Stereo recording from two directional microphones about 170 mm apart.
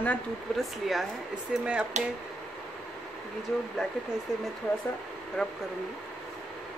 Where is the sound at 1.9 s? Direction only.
45° right (ahead or behind).